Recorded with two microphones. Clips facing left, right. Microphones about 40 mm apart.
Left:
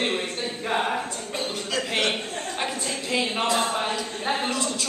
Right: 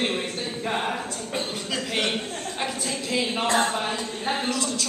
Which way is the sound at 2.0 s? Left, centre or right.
Centre.